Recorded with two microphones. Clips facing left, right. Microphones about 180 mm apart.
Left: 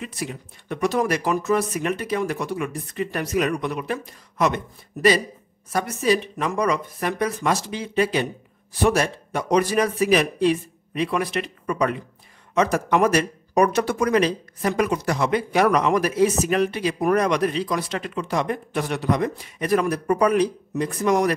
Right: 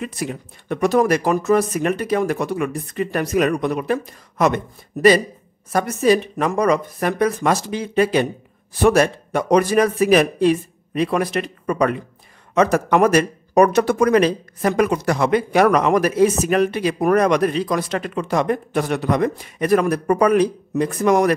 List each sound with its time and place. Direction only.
0.0 s speech: 50° right (ahead or behind)
5.7 s speech: 50° right (ahead or behind)